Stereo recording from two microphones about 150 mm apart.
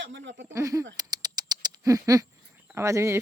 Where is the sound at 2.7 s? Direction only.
20° right (ahead or behind).